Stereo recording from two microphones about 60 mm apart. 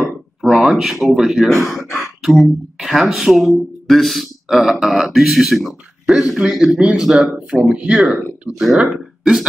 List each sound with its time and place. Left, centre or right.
0.0 s a sound: centre
1.3 s a man's voice: centre
8.5 s speech: centre